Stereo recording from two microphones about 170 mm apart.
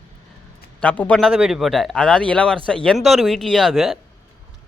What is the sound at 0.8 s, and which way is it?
Speech, 10° left (ahead or behind).